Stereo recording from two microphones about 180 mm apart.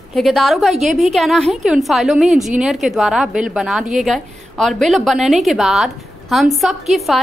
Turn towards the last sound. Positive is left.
turn(degrees=0)  # may be behind; listen again after turning